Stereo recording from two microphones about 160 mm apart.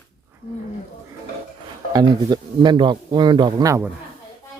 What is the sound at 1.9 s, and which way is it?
Speech, 25° right (ahead or behind).